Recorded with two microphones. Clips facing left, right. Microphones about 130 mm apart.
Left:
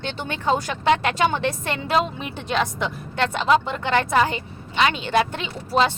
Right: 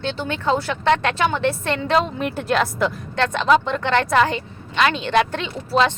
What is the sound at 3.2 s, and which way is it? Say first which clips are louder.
Speech: right 2 dB; 10° left (ahead or behind).